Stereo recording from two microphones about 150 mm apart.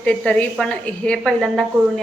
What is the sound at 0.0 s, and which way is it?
A woman's voice, 10° left (ahead or behind).